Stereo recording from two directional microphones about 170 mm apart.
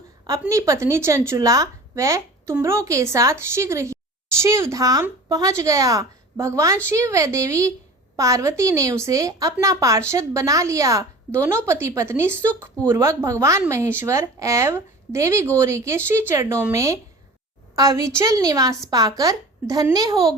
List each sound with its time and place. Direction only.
0.4 s a woman's voice: 20° right (ahead or behind)